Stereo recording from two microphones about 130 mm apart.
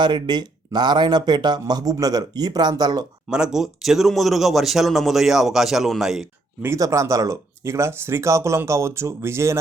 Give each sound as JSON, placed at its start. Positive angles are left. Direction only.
{"t": 0.0, "sound": "speech", "side_deg": -35}
{"t": 3.2, "sound": "a man's voice", "side_deg": -5}
{"t": 6.6, "sound": "speech", "side_deg": -25}